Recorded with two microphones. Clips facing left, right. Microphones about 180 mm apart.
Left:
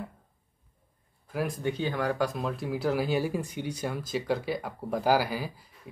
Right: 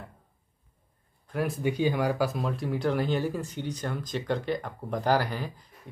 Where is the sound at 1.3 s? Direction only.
Centre (ahead or behind).